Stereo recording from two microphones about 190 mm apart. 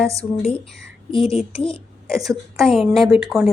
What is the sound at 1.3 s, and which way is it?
Speech, 30° left (ahead or behind).